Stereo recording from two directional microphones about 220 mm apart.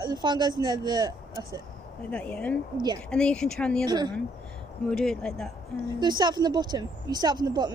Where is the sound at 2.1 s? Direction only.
5° left (ahead or behind).